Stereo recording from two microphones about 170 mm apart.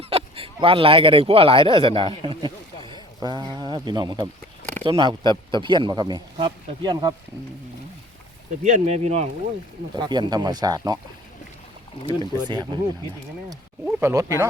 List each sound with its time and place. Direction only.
0.0 s speech: 35° right (ahead or behind)
8.6 s speech: 45° right (ahead or behind)
9.9 s speech: 25° right (ahead or behind)
12.0 s speech: 30° right (ahead or behind)
13.8 s speech: 15° right (ahead or behind)